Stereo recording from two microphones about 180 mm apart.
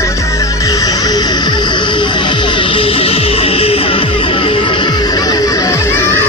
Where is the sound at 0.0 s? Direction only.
15° left (ahead or behind).